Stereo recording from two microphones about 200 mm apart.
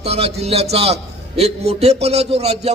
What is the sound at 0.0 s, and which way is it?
A man's voice, 30° right (ahead or behind).